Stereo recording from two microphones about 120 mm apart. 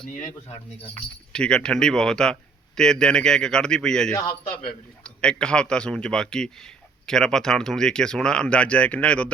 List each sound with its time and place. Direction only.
0.1 s speech: 90° left
1.3 s a man's voice: 5° left (ahead or behind)